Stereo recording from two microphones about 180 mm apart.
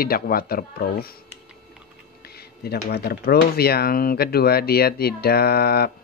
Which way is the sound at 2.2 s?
60° left (ahead or behind).